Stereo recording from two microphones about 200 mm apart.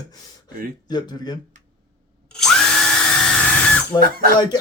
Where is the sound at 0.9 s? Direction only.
20° left (ahead or behind).